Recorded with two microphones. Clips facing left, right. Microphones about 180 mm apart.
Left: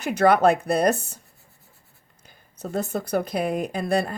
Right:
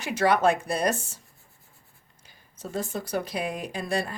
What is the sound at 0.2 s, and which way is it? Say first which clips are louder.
Speech: left 4 dB; 55° left (ahead or behind).